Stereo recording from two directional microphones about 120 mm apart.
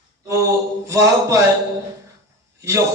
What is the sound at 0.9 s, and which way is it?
Speech, 25° right (ahead or behind).